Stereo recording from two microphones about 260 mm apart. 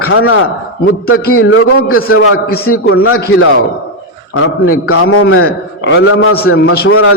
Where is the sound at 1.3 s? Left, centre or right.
Left.